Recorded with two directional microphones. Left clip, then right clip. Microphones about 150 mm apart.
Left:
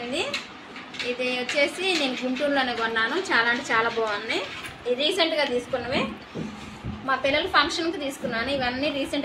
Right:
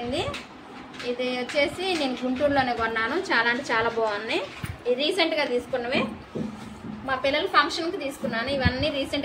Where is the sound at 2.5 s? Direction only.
20° right (ahead or behind).